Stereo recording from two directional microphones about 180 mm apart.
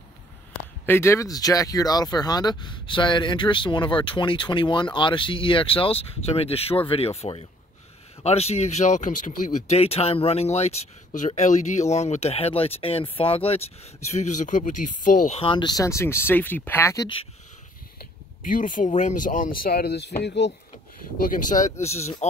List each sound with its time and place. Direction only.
0.8 s speech: 15° left (ahead or behind)
18.4 s speech: 50° left (ahead or behind); by 20.5 s 70° left (ahead or behind)
21.2 s speech: 50° left (ahead or behind)